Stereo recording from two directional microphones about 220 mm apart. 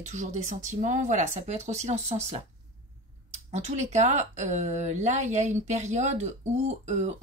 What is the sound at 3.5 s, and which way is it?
Speech, 30° right (ahead or behind).